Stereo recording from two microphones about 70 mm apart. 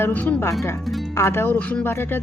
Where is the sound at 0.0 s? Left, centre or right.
Left.